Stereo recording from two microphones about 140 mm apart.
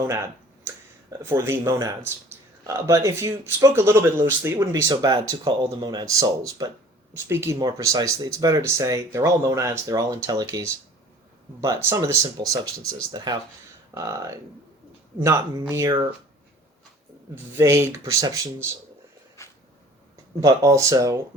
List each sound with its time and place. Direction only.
1.2 s speech: 20° right (ahead or behind)
17.6 s speech: 20° right (ahead or behind)
19.4 s a sound: 20° left (ahead or behind)
20.4 s speech: 25° right (ahead or behind)